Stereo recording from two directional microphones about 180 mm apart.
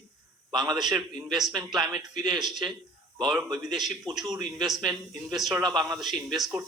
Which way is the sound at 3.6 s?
Centre (ahead or behind).